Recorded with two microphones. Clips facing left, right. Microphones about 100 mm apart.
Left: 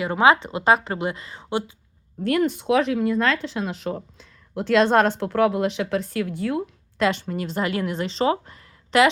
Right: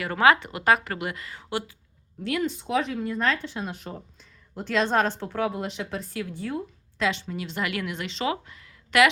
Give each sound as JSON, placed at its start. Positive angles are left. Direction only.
{"t": 0.0, "sound": "a woman's voice", "side_deg": 20}
{"t": 2.2, "sound": "speech", "side_deg": 50}
{"t": 7.0, "sound": "speech", "side_deg": 50}